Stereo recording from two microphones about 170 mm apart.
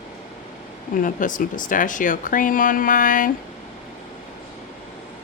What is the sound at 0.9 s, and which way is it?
Speech, 50° left (ahead or behind).